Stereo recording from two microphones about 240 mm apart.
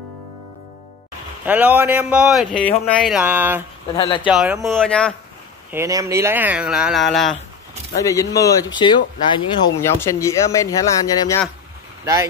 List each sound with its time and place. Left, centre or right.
1.4 s speech: centre
3.9 s speech: centre
4.3 s speech: centre
5.7 s speech: centre
8.0 s speech: centre
12.0 s speech: centre